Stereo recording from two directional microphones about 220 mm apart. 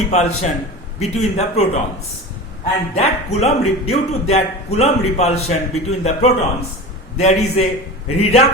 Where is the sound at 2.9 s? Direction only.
30° left (ahead or behind).